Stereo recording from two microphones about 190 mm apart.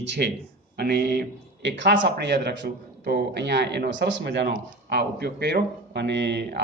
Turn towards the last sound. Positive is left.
turn(degrees=-65)  # may be behind; listen again after turning